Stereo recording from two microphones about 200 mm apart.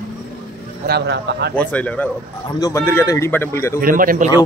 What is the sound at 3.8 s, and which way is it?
Speech, 45° right (ahead or behind).